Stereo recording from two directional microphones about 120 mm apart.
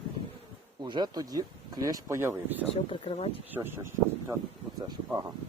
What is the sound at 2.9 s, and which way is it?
Speech, 55° left (ahead or behind).